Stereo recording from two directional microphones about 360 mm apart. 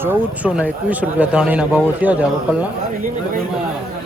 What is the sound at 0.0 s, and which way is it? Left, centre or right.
Speech, centre.